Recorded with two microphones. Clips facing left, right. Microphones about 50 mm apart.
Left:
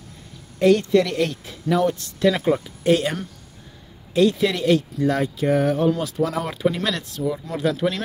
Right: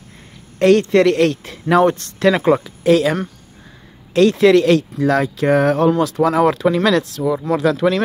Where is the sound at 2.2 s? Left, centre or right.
Right.